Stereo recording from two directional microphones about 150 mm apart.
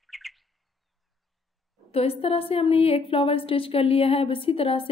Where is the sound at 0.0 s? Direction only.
Centre (ahead or behind).